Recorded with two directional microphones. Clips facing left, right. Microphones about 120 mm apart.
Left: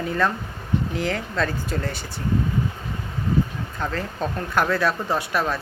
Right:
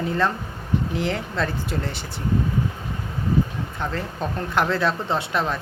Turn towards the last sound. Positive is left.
turn(degrees=-25)  # may be behind; listen again after turning